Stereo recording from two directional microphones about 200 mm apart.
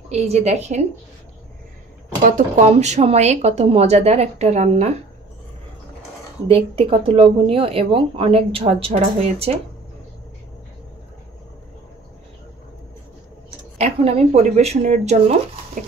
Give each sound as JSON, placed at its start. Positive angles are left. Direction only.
{"t": 0.1, "sound": "speech", "side_deg": -30}
{"t": 2.2, "sound": "speech", "side_deg": -35}
{"t": 6.4, "sound": "speech", "side_deg": -25}
{"t": 13.7, "sound": "speech", "side_deg": -30}